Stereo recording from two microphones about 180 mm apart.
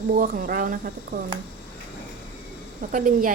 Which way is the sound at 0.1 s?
50° right (ahead or behind).